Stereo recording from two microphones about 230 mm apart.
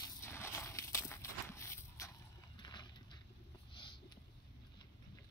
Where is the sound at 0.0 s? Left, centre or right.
Centre.